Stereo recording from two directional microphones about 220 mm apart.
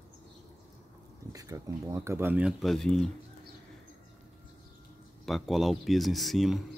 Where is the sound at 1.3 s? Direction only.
15° right (ahead or behind); by 3.1 s centre (ahead or behind).